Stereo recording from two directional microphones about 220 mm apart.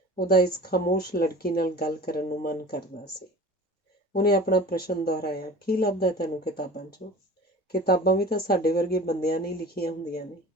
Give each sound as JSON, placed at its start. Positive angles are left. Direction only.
{"t": 0.2, "sound": "speech", "side_deg": 45}
{"t": 4.1, "sound": "speech", "side_deg": 45}